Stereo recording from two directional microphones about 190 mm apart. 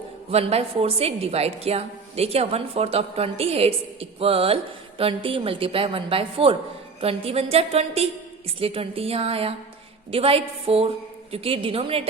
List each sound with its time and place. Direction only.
0.3 s a woman's voice: 35° right (ahead or behind)